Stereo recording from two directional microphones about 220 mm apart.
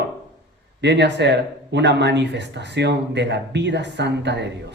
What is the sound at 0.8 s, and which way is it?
Speech, 50° right (ahead or behind).